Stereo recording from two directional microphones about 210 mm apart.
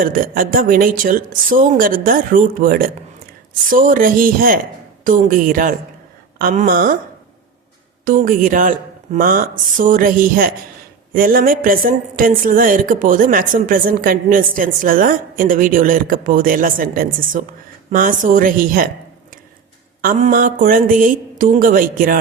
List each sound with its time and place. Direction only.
0.0 s a woman's voice: 40° right (ahead or behind)
8.0 s a woman's voice: 40° right (ahead or behind)
20.0 s a woman's voice: 35° right (ahead or behind)